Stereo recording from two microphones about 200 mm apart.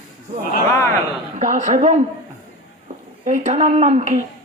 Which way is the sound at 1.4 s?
35° right (ahead or behind).